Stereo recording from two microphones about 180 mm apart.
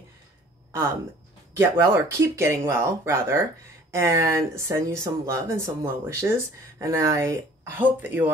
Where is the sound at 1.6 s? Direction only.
15° right (ahead or behind).